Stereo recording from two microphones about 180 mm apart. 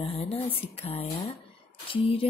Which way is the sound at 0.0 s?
35° left (ahead or behind).